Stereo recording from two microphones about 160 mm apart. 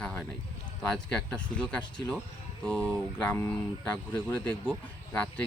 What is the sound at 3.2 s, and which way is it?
Speech, 10° left (ahead or behind).